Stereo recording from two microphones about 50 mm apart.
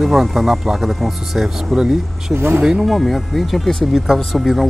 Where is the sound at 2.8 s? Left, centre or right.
Centre.